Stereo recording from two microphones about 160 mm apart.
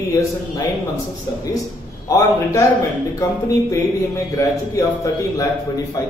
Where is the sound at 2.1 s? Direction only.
20° left (ahead or behind).